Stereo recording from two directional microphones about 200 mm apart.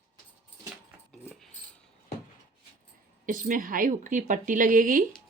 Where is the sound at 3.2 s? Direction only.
40° right (ahead or behind).